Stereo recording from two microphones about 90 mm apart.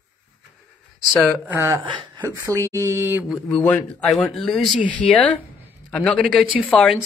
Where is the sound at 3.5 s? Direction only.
15° left (ahead or behind).